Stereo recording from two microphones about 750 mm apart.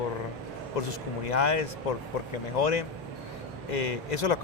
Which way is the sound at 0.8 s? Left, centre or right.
Left.